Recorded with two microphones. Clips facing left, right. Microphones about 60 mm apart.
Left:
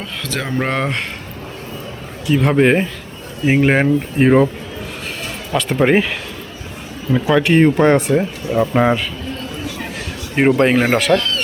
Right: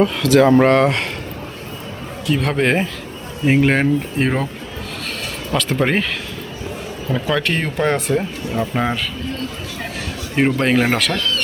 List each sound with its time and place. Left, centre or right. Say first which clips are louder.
0.0 s speech: right 12 dB; centre
2.2 s speech: left 4 dB; centre
5.5 s speech: left 4 dB; centre
7.1 s speech: left 6 dB; centre
8.6 s speech: left 7 dB; centre
10.3 s speech: left 3 dB; centre